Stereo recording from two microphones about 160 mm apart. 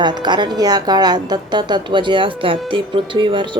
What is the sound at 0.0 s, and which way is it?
Speech, 30° right (ahead or behind).